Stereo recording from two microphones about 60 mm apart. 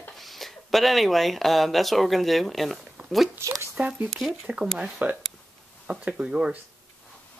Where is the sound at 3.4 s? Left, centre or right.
Right.